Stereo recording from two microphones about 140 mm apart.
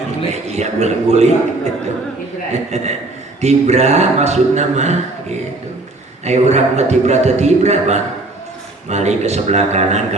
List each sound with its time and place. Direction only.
0.4 s a man's voice: 55° right (ahead or behind)
2.5 s a man's voice: 50° right (ahead or behind)